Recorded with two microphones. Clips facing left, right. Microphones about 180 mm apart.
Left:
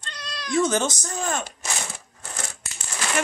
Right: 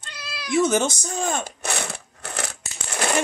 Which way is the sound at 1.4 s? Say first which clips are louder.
Right 4 dB; 65° right (ahead or behind).